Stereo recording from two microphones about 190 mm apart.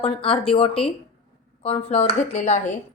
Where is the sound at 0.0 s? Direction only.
30° left (ahead or behind).